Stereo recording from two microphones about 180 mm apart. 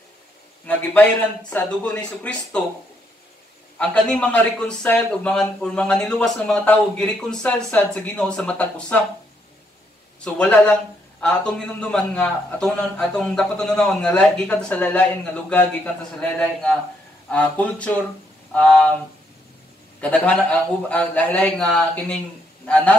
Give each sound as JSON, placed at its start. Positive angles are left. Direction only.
{"t": 1.5, "sound": "a man's voice", "side_deg": 5}
{"t": 3.7, "sound": "a man's voice", "side_deg": 5}
{"t": 10.2, "sound": "a man's voice", "side_deg": 5}
{"t": 20.0, "sound": "a man's voice", "side_deg": 5}